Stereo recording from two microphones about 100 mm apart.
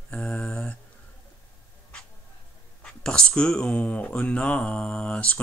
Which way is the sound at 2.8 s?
10° left (ahead or behind).